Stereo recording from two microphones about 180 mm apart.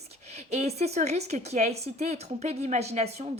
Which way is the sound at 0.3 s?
35° right (ahead or behind).